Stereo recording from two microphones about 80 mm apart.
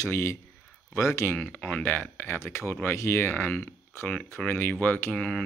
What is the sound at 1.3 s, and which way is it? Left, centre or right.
Speech, centre.